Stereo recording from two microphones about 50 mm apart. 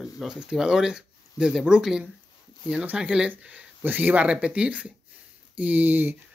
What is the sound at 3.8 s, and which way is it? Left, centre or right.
Speech, right.